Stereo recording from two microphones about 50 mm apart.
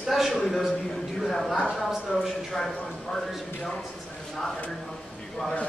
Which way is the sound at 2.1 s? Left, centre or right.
Left.